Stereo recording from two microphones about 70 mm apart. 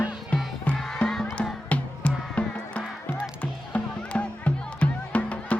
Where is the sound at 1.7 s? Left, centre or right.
Centre.